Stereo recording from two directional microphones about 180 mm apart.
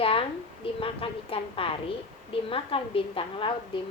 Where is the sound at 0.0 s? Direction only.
30° left (ahead or behind).